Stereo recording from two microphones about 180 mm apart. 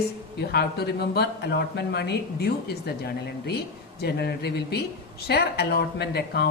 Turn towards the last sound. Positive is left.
turn(degrees=60)  # may be behind; listen again after turning